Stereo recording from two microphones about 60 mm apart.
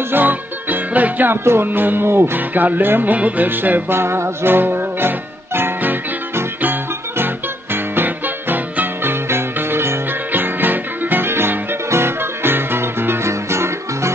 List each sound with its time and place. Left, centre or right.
0.1 s music: right
1.4 s music: right
1.7 s music: right